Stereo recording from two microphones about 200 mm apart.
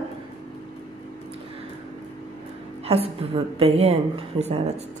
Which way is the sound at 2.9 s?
30° right (ahead or behind).